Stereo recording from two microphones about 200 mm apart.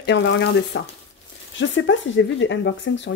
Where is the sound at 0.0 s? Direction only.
60° left (ahead or behind).